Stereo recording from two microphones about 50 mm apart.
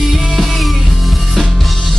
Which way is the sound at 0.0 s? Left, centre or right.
Centre.